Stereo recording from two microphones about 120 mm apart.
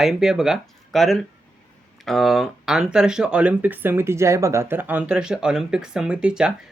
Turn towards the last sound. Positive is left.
turn(degrees=-5)  # may be behind; listen again after turning